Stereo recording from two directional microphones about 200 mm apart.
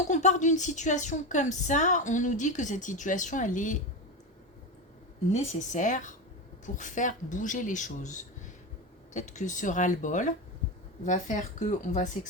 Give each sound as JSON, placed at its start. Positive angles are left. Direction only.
{"t": 0.1, "sound": "speech", "side_deg": 35}
{"t": 5.3, "sound": "speech", "side_deg": 35}